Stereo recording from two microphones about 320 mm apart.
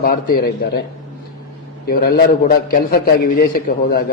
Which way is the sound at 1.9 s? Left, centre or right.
Left.